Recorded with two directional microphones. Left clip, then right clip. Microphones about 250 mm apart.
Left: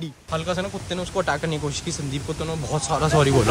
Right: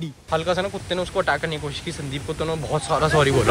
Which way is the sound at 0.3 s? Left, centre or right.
Centre.